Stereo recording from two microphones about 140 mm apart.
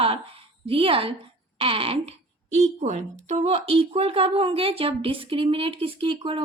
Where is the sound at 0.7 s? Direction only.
40° right (ahead or behind).